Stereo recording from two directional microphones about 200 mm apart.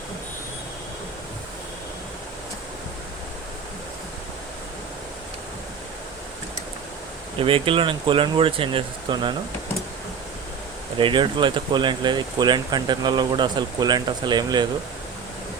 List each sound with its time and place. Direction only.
7.3 s speech: 25° right (ahead or behind)
10.9 s speech: 25° right (ahead or behind)